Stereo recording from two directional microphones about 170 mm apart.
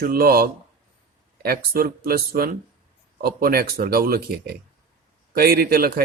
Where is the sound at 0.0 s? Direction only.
60° right (ahead or behind).